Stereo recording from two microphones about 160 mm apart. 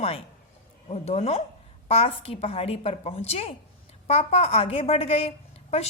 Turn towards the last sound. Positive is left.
turn(degrees=40)  # may be behind; listen again after turning